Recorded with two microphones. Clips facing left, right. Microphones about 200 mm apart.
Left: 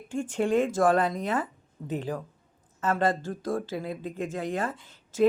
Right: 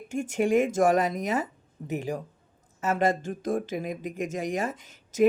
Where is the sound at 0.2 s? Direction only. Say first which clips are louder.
Right 1 dB; 15° right (ahead or behind).